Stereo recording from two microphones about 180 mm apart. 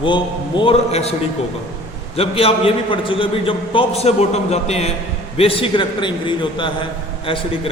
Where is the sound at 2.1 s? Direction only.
35° left (ahead or behind).